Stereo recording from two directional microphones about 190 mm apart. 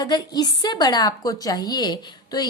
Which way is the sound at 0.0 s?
20° left (ahead or behind).